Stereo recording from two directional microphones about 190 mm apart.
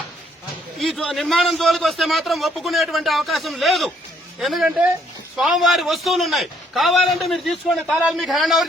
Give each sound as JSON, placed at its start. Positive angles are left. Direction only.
{"t": 0.8, "sound": "a man's voice", "side_deg": 0}